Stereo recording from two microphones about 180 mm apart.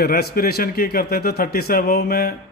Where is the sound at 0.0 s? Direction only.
60° left (ahead or behind).